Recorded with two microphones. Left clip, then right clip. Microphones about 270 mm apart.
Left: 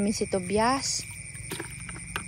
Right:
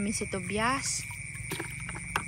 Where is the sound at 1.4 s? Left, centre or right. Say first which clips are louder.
Even; centre.